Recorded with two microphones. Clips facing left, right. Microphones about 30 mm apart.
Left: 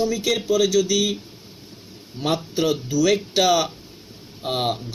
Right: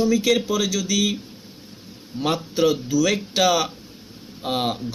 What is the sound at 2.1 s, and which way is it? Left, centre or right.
Speech, centre.